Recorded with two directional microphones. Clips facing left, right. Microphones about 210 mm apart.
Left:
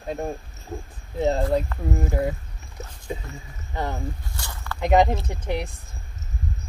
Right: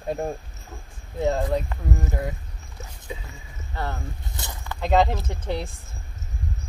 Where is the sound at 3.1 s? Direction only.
45° left (ahead or behind).